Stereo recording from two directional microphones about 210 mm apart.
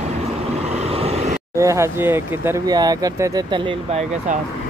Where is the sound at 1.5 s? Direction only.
15° right (ahead or behind).